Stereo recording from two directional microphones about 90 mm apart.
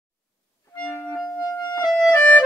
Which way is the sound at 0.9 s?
25° left (ahead or behind).